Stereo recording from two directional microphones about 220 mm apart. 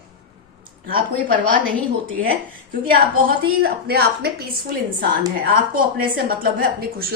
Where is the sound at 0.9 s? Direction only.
40° right (ahead or behind).